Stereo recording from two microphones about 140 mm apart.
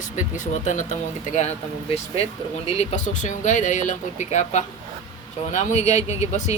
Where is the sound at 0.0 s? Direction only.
65° left (ahead or behind).